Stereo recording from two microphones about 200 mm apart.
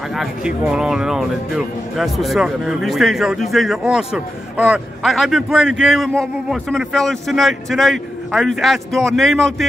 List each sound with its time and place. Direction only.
0.1 s a man's voice: centre (ahead or behind)